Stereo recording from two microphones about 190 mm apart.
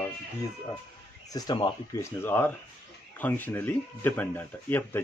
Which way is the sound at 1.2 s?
20° left (ahead or behind).